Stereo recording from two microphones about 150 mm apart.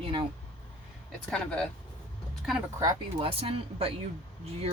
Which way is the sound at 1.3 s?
5° left (ahead or behind).